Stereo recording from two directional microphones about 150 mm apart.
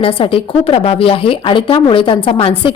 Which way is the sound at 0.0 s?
35° left (ahead or behind).